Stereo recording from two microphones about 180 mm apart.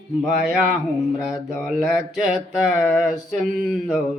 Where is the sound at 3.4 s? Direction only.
5° left (ahead or behind).